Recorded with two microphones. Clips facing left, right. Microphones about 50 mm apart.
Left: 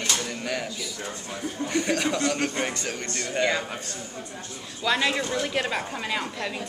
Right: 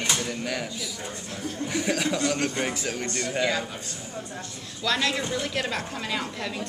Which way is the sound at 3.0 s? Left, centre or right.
Right.